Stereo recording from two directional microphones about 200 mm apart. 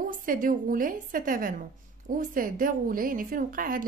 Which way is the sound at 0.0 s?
40° right (ahead or behind).